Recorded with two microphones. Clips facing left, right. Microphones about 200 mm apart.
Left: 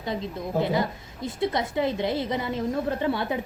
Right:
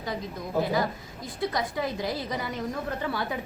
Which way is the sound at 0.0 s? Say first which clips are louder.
Left 3 dB; 25° left (ahead or behind).